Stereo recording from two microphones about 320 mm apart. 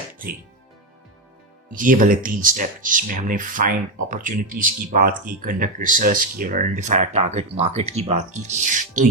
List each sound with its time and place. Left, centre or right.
1.7 s speech: right